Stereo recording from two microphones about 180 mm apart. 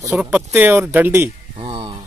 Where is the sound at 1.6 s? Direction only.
25° right (ahead or behind).